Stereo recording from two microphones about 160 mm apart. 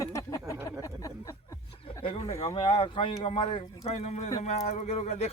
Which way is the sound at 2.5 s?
30° left (ahead or behind).